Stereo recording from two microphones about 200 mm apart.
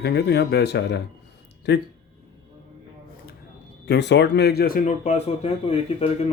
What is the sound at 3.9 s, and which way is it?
Speech, 60° left (ahead or behind).